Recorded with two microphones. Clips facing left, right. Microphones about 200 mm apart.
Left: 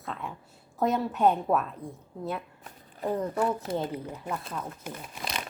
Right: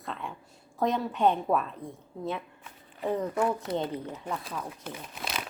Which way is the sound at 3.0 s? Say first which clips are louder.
Even; 5° left (ahead or behind).